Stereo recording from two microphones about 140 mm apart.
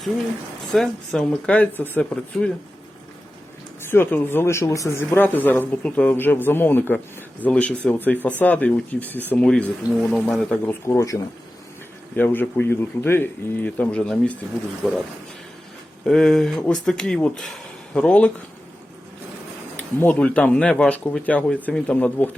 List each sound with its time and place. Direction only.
0.7 s speech: centre (ahead or behind)
3.8 s speech: 15° left (ahead or behind)
10.8 s speech: 20° left (ahead or behind)
16.0 s speech: 5° left (ahead or behind)
19.7 s speech: 10° left (ahead or behind)